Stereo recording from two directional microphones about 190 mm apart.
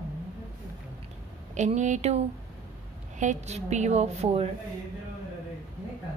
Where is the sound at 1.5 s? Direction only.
40° right (ahead or behind).